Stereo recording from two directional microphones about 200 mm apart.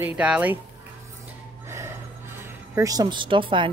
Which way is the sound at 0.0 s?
10° right (ahead or behind).